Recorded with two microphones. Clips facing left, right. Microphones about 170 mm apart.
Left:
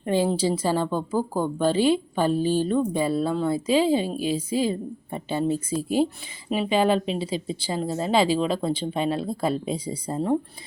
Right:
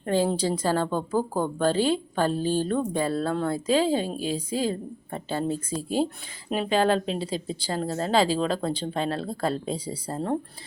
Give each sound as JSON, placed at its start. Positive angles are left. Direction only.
{"t": 0.0, "sound": "a woman's voice", "side_deg": 10}